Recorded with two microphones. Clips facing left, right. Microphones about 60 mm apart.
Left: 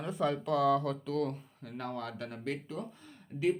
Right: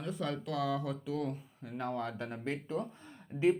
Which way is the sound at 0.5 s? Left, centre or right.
Centre.